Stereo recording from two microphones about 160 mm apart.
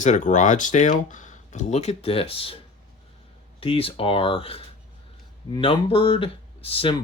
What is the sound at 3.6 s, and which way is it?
Speech, 35° left (ahead or behind).